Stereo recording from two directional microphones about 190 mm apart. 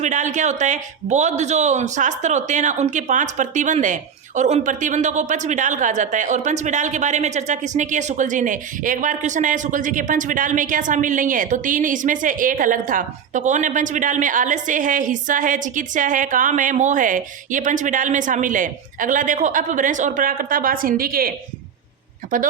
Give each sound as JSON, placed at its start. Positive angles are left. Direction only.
{"t": 0.0, "sound": "a man's voice", "side_deg": -40}